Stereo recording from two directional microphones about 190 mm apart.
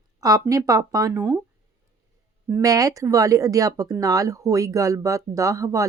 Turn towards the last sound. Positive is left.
turn(degrees=-15)  # may be behind; listen again after turning